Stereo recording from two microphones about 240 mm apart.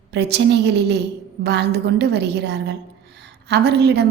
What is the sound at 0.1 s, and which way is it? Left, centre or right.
A woman's voice, right.